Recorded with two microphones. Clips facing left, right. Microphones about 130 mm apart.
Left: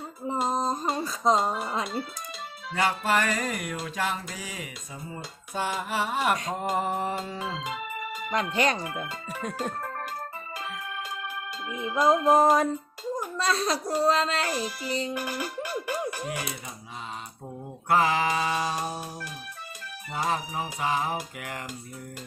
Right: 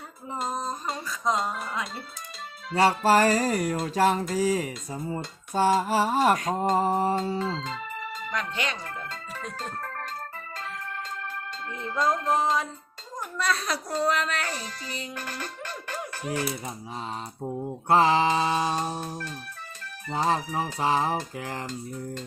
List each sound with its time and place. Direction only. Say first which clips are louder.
0.4 s a sound: left 3 dB; 35° left (ahead or behind)
1.6 s speech: left 2 dB; 30° left (ahead or behind)
2.7 s music: right 5 dB; 35° right (ahead or behind)
7.6 s organ: left 1 dB; 10° left (ahead or behind)
8.3 s speech: left 7 dB; 35° left (ahead or behind)
11.7 s speech: left 4 dB; 10° left (ahead or behind)
12.3 s music: left 7 dB; 45° left (ahead or behind)
13.3 s a child's voice: even; 30° left (ahead or behind)
14.4 s speech: left 5 dB; 10° left (ahead or behind)
15.1 s music: left 5 dB; 10° left (ahead or behind)
17.4 s mantra: right 7 dB; 30° right (ahead or behind)
18.8 s speech: right 2 dB; 10° left (ahead or behind)
20.1 s music: right 3 dB; 35° right (ahead or behind)